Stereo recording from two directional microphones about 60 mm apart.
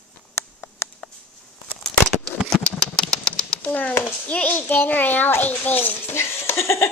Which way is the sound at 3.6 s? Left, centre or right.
Left.